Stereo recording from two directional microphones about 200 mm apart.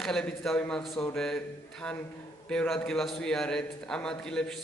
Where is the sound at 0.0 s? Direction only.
5° left (ahead or behind).